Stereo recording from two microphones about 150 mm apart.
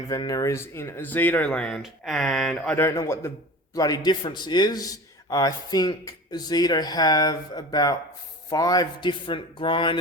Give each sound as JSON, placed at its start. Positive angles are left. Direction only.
{"t": 0.1, "sound": "a man's voice", "side_deg": 25}